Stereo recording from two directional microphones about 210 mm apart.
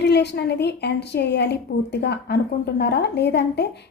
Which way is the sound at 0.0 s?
55° left (ahead or behind).